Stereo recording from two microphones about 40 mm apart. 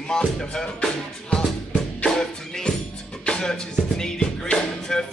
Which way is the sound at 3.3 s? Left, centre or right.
Centre.